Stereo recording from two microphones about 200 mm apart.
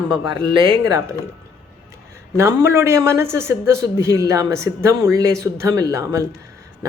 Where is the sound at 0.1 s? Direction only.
25° right (ahead or behind).